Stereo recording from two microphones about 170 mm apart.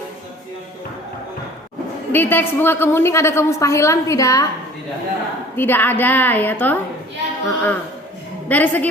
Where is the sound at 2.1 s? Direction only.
10° left (ahead or behind).